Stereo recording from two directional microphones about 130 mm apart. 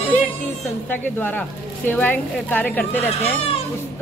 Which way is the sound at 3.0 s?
50° left (ahead or behind).